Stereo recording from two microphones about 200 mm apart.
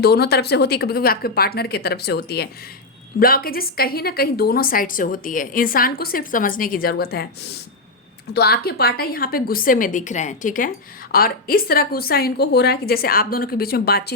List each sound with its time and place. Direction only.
0.0 s a woman's voice: 55° left (ahead or behind)
8.3 s a woman's voice: 50° left (ahead or behind)